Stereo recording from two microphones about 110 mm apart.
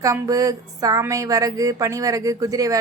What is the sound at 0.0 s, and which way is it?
A woman's voice, 30° right (ahead or behind).